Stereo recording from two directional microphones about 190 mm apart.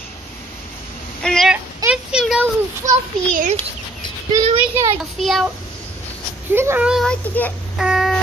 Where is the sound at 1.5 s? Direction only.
5° right (ahead or behind).